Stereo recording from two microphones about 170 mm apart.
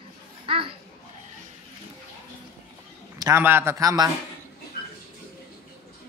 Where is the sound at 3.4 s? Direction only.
15° right (ahead or behind).